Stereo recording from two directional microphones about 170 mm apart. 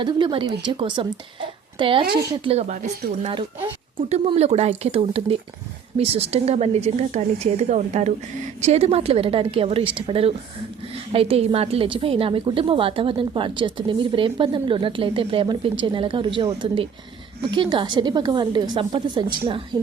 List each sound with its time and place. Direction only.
0.0 s a woman's voice: 30° right (ahead or behind)